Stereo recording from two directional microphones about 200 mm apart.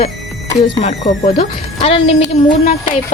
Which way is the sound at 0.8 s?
30° left (ahead or behind).